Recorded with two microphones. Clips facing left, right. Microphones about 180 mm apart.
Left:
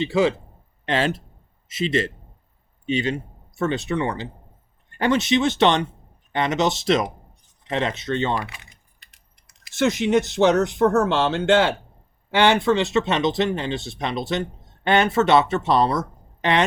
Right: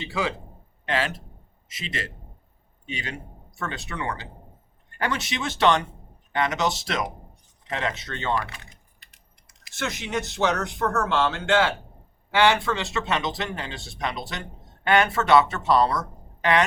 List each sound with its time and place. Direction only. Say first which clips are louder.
0.0 s a man's voice: left 9 dB; 20° left (ahead or behind)
9.7 s speech: left 10 dB; 20° left (ahead or behind)